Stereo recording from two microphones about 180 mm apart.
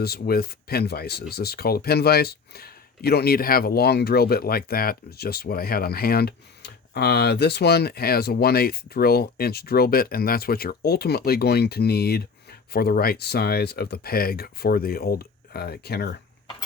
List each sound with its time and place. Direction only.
0.0 s speech: 60° left (ahead or behind)